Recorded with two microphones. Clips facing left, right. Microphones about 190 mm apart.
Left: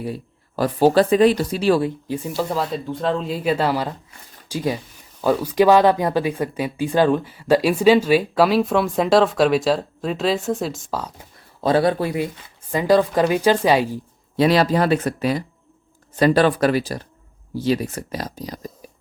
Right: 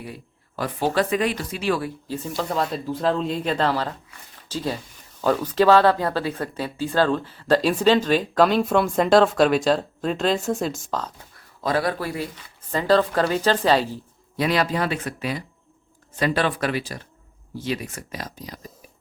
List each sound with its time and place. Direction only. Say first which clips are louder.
0.0 s speech: left 9 dB; 35° left (ahead or behind)
2.0 s speech: left 3 dB; 10° left (ahead or behind)
11.6 s speech: left 6 dB; 25° left (ahead or behind)
14.3 s speech: left 6 dB; 30° left (ahead or behind)